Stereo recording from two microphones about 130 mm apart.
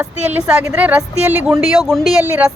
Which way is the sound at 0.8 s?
10° right (ahead or behind).